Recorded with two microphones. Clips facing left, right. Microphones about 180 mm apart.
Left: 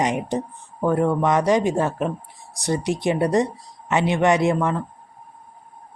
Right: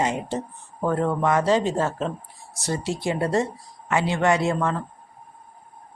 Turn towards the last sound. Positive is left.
turn(degrees=15)  # may be behind; listen again after turning